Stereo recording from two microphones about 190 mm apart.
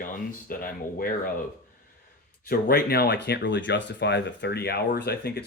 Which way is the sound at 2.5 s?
55° left (ahead or behind).